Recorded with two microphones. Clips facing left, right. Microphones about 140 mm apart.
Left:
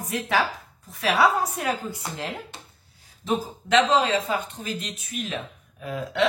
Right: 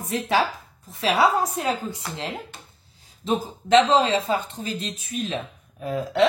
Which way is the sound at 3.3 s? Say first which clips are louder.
Right 4 dB; 25° right (ahead or behind).